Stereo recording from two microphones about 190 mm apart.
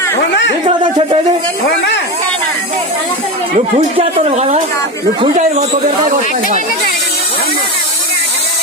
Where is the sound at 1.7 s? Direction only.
65° left (ahead or behind).